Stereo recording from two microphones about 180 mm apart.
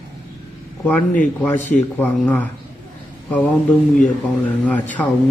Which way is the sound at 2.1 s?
10° left (ahead or behind).